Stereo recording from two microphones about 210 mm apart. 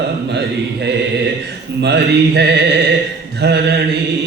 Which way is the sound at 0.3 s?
55° right (ahead or behind).